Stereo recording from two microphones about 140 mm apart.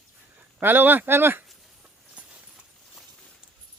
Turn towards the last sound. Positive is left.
turn(degrees=-10)  # may be behind; listen again after turning